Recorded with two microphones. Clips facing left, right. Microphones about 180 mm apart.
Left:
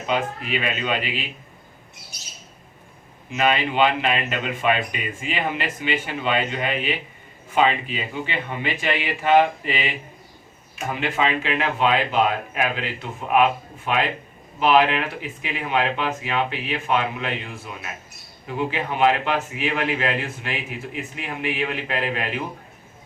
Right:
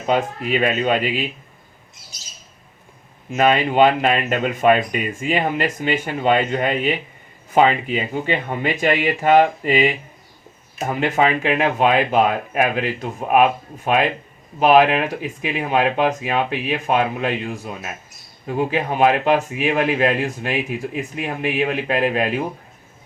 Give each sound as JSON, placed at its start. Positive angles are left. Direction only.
{"t": 0.0, "sound": "speech", "side_deg": -45}
{"t": 2.1, "sound": "squawk", "side_deg": 60}
{"t": 3.3, "sound": "speech", "side_deg": -45}
{"t": 8.1, "sound": "speech", "side_deg": -45}